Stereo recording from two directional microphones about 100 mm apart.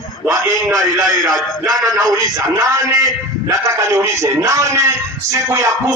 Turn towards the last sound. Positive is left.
turn(degrees=-30)  # may be behind; listen again after turning